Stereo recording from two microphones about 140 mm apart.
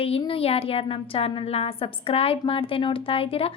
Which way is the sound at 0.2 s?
40° left (ahead or behind).